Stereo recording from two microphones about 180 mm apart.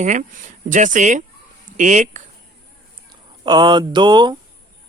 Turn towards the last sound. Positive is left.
turn(degrees=-25)  # may be behind; listen again after turning